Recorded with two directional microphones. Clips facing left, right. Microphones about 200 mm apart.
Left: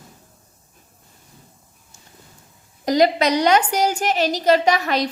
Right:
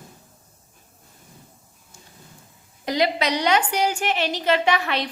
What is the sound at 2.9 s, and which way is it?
A woman's voice, 45° left (ahead or behind).